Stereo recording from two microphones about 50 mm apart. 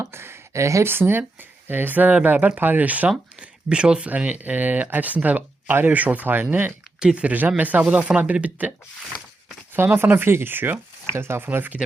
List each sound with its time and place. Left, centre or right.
0.0 s a sound: right
0.5 s speech: right
0.9 s speech: right
3.4 s speech: centre
4.1 s speech: right
7.0 s speech: centre
7.3 s speech: right
9.7 s speech: right
11.4 s speech: right